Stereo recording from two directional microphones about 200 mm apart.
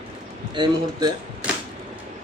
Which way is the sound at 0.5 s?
20° right (ahead or behind).